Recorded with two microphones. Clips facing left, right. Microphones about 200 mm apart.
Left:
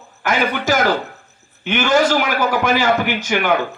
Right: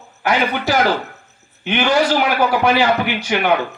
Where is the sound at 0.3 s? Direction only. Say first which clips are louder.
Even; 45° left (ahead or behind).